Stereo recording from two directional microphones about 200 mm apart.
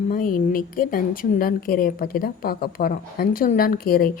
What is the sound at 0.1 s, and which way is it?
Speech, 40° left (ahead or behind).